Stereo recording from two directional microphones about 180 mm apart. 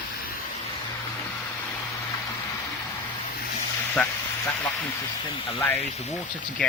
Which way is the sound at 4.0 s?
5° left (ahead or behind).